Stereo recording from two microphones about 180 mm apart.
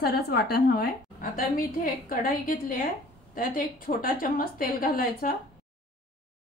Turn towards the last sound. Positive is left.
turn(degrees=50)  # may be behind; listen again after turning